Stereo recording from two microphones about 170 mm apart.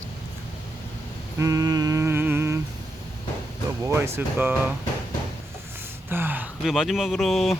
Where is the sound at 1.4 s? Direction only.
20° right (ahead or behind).